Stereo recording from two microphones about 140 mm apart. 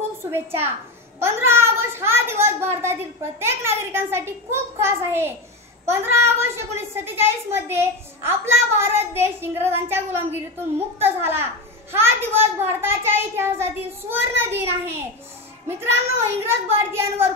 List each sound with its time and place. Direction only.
0.2 s a child's voice: 15° right (ahead or behind)